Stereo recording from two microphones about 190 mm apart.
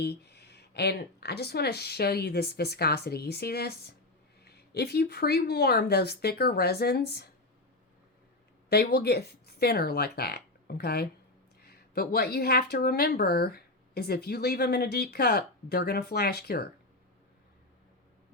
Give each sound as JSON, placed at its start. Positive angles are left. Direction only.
{"t": 0.0, "sound": "speech", "side_deg": 60}
{"t": 8.7, "sound": "speech", "side_deg": 55}